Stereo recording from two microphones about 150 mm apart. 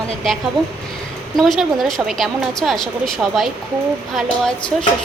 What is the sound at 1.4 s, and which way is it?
A woman's voice, centre (ahead or behind).